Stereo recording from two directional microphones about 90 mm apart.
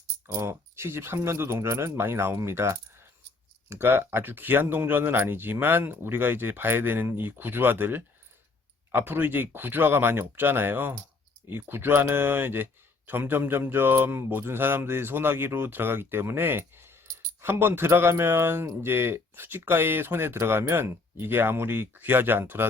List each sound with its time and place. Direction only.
0.3 s speech: 30° right (ahead or behind)